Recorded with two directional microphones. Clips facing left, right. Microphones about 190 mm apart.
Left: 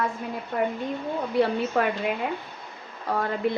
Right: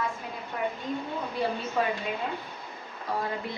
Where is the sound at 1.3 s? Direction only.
65° left (ahead or behind).